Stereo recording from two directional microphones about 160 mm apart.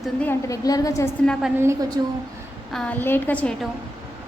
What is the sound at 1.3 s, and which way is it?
Speech, centre (ahead or behind).